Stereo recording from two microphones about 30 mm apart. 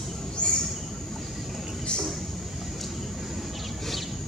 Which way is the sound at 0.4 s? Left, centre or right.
Left.